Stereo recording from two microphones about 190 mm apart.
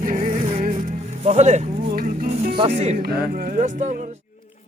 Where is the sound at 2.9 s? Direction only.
55° right (ahead or behind).